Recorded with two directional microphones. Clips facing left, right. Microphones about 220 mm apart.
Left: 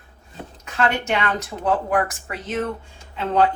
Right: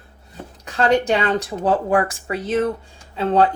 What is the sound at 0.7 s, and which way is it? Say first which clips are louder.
A woman's voice: right 5 dB; 35° right (ahead or behind).